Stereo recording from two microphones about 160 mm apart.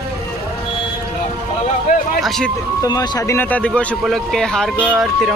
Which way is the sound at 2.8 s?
25° left (ahead or behind).